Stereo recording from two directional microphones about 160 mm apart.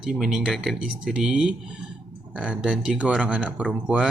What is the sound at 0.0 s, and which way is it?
Speech, 5° right (ahead or behind).